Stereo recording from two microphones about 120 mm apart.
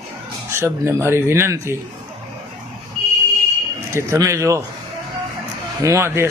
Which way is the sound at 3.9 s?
25° right (ahead or behind).